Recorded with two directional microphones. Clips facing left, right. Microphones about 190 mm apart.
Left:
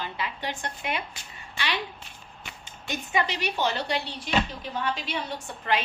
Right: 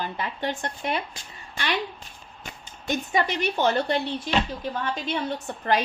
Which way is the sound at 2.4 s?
45° right (ahead or behind).